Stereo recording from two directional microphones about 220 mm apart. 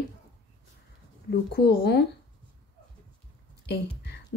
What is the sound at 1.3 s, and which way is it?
Speech, 45° left (ahead or behind).